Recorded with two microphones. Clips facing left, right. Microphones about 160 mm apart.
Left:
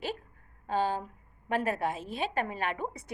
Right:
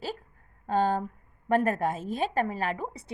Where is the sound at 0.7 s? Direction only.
45° right (ahead or behind).